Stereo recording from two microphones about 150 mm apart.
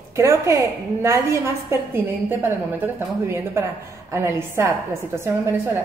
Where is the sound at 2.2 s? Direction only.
15° right (ahead or behind).